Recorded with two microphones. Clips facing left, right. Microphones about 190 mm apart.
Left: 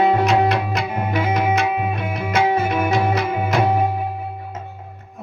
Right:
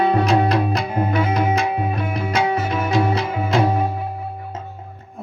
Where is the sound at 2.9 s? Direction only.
30° right (ahead or behind).